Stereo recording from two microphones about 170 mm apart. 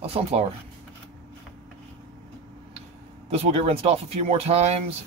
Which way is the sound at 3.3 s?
35° right (ahead or behind).